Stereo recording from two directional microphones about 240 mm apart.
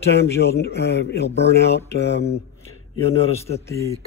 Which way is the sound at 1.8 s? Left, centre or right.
Left.